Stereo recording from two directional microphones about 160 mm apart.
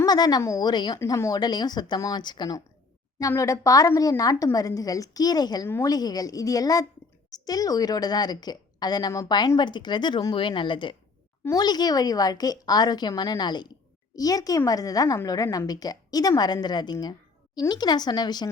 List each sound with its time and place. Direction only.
0.0 s a woman's voice: 25° left (ahead or behind)